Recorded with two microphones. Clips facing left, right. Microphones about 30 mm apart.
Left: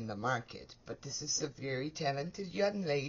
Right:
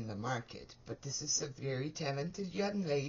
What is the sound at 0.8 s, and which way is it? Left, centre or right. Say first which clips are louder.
Speech: even; centre.